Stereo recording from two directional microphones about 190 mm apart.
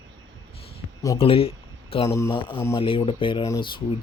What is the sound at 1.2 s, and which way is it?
Speech, 30° left (ahead or behind).